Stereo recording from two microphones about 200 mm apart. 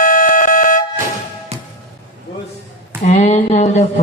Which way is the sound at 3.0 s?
35° left (ahead or behind).